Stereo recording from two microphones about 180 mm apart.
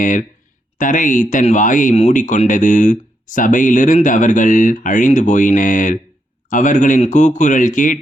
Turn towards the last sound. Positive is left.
turn(degrees=45)  # may be behind; listen again after turning